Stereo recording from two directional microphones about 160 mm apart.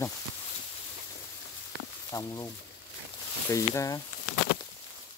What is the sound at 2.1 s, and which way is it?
Speech, 20° left (ahead or behind).